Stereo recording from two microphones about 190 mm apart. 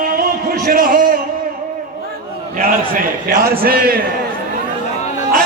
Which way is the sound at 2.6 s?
50° right (ahead or behind).